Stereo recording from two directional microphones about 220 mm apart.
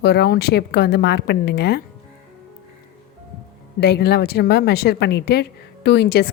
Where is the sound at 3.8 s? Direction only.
50° left (ahead or behind).